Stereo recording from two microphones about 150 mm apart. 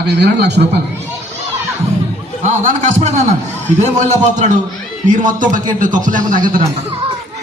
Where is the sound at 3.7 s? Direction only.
50° right (ahead or behind).